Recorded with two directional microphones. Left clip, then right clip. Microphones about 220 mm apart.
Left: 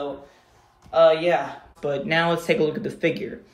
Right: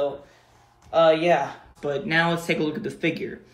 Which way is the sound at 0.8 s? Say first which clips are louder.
Left 1 dB; 10° left (ahead or behind).